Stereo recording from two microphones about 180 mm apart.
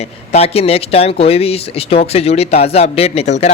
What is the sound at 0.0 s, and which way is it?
Speech, 35° left (ahead or behind).